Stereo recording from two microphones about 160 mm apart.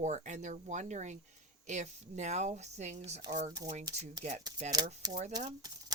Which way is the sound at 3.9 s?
25° right (ahead or behind).